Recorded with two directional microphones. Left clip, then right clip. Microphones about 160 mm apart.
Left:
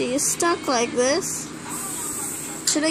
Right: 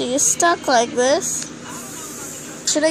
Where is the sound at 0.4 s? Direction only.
30° right (ahead or behind).